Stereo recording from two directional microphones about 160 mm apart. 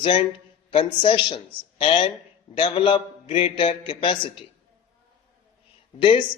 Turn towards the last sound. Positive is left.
turn(degrees=35)  # may be behind; listen again after turning